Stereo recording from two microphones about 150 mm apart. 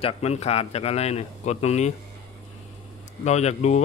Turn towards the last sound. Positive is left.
turn(degrees=50)  # may be behind; listen again after turning